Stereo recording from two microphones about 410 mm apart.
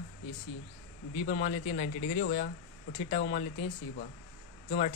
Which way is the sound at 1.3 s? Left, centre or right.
Centre.